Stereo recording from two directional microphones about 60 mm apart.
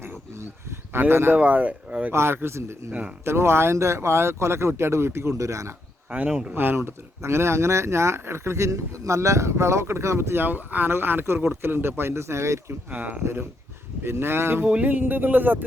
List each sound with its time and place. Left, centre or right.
0.0 s a sound: right
1.4 s speech: right
2.1 s speech: right
6.1 s speech: right
6.5 s speech: right
6.7 s speech: right
12.9 s speech: right
14.6 s speech: right